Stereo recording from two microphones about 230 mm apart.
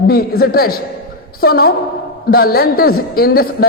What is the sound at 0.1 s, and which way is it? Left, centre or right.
A man's voice, left.